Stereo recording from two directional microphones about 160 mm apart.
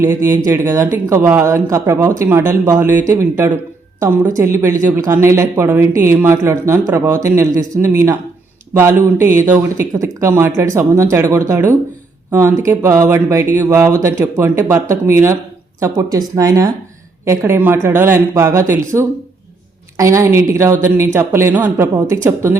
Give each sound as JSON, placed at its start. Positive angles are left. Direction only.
{"t": 0.0, "sound": "speech", "side_deg": -15}